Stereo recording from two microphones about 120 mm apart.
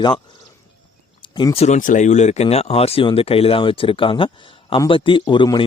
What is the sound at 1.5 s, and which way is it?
A man's voice, 70° left (ahead or behind).